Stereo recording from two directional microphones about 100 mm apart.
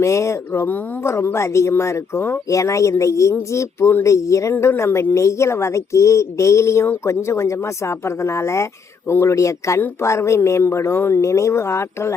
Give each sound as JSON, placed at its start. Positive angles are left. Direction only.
{"t": 0.0, "sound": "speech", "side_deg": 30}